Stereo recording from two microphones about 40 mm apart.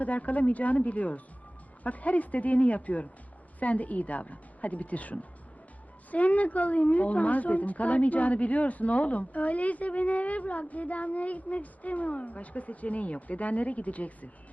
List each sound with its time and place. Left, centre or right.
0.0 s a woman's voice: left